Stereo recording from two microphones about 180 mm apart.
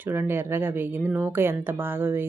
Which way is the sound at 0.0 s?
10° right (ahead or behind).